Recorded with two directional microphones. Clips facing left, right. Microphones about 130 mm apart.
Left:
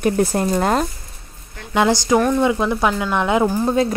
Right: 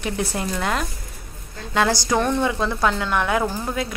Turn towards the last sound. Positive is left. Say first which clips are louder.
# left 9 dB
turn(degrees=35)  # may be behind; listen again after turning